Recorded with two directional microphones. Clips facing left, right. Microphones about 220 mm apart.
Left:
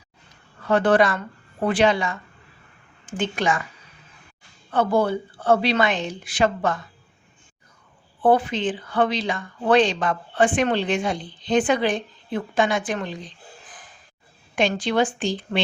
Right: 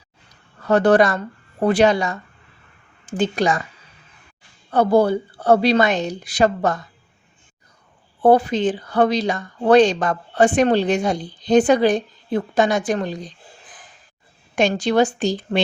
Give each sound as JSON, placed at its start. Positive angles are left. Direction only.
{"t": 0.6, "sound": "speech", "side_deg": -40}
{"t": 4.7, "sound": "speech", "side_deg": -40}
{"t": 8.2, "sound": "speech", "side_deg": -40}
{"t": 14.5, "sound": "speech", "side_deg": -45}